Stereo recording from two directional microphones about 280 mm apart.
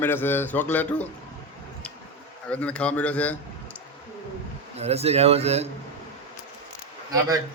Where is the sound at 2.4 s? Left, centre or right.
Centre.